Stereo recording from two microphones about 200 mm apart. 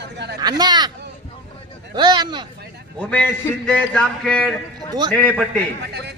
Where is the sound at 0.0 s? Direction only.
60° right (ahead or behind).